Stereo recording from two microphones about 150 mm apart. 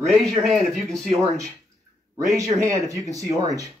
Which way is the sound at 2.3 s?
20° right (ahead or behind).